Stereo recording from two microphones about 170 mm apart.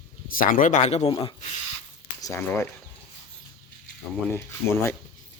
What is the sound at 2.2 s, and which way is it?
Speech, 20° left (ahead or behind).